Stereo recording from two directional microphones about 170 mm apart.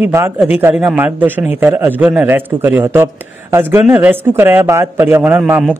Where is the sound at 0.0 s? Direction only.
10° right (ahead or behind).